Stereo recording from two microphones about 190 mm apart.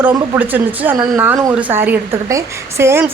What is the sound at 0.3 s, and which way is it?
Speech, 10° right (ahead or behind).